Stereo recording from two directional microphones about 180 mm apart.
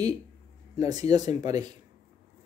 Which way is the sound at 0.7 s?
20° right (ahead or behind).